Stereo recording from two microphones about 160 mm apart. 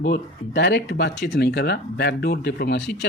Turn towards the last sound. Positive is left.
turn(degrees=90)